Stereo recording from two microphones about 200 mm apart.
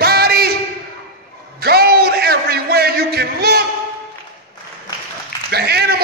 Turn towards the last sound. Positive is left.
turn(degrees=-50)  # may be behind; listen again after turning